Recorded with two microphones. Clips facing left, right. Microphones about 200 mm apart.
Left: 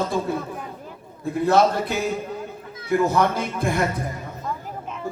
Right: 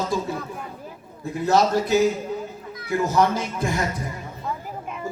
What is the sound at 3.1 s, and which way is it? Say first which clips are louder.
Speech: even; 55° left (ahead or behind).